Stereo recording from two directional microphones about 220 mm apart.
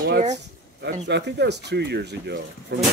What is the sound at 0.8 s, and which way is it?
A man's voice, 50° right (ahead or behind).